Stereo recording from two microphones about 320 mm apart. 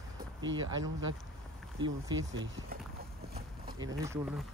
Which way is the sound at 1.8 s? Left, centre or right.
Centre.